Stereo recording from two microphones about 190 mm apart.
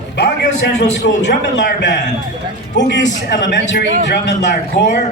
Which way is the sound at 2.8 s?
65° left (ahead or behind).